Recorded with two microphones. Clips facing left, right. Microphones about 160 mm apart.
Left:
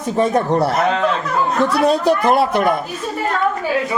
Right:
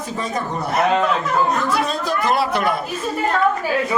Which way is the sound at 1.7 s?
65° left (ahead or behind).